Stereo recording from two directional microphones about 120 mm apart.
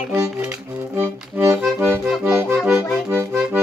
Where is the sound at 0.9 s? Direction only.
20° right (ahead or behind).